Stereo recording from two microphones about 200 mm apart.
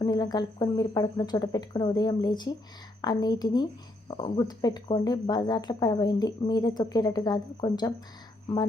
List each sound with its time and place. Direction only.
0.0 s speech: 20° left (ahead or behind)